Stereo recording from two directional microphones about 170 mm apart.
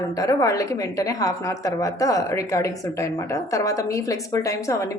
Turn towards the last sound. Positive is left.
turn(degrees=20)  # may be behind; listen again after turning